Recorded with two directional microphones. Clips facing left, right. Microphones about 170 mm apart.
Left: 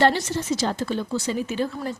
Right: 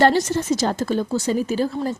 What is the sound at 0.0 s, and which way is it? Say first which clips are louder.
A woman's voice: right 4 dB; 45° right (ahead or behind).